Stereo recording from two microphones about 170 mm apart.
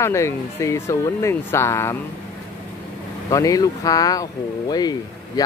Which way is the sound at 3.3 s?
20° left (ahead or behind).